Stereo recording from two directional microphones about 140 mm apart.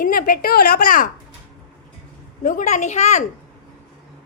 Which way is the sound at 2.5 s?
65° left (ahead or behind).